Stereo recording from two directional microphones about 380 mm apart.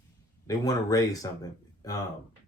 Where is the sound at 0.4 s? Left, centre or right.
Centre.